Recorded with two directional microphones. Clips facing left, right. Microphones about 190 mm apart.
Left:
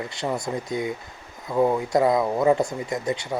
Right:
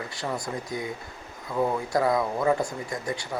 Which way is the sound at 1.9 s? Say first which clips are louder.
Left 4 dB; 20° left (ahead or behind).